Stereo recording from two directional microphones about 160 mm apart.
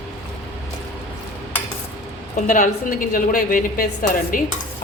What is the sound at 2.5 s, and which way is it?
A woman's voice, 55° left (ahead or behind).